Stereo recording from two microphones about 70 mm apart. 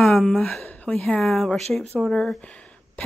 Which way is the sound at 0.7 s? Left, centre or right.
Left.